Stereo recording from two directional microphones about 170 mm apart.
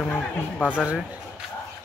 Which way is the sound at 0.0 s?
5° left (ahead or behind).